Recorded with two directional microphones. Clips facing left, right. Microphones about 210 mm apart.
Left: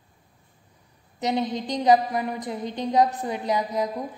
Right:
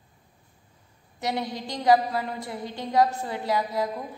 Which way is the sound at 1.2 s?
20° left (ahead or behind).